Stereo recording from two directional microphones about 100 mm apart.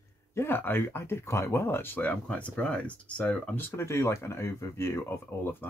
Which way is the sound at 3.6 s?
25° left (ahead or behind).